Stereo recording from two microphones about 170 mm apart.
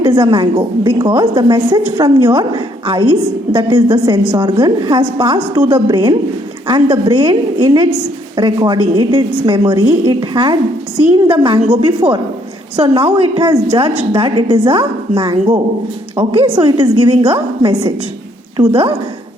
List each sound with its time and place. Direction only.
0.0 s a woman's voice: 25° right (ahead or behind)
11.6 s a woman's voice: 40° right (ahead or behind)
11.9 s a woman's voice: 25° right (ahead or behind)